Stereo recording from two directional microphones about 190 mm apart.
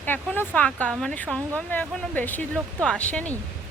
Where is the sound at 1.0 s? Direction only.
5° left (ahead or behind).